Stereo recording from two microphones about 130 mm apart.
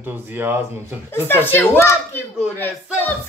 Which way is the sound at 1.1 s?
15° left (ahead or behind).